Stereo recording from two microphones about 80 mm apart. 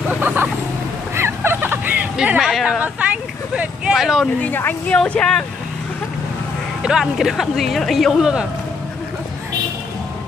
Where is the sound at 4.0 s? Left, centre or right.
Centre.